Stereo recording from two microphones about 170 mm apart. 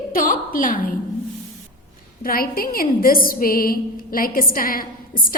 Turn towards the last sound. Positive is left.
turn(degrees=55)  # may be behind; listen again after turning